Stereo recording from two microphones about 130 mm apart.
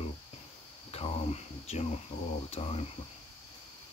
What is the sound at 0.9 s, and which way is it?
Speech, 55° left (ahead or behind).